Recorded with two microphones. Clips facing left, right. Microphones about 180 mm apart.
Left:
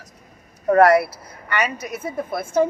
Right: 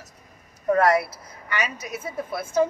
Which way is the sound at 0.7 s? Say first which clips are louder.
Left 5 dB; 65° left (ahead or behind).